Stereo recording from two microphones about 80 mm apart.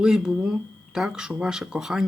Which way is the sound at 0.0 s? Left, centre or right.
Centre.